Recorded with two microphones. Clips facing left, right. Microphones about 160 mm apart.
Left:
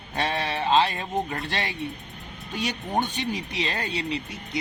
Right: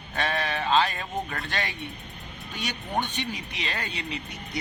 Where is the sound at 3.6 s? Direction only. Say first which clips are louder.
Left 4 dB; 35° left (ahead or behind).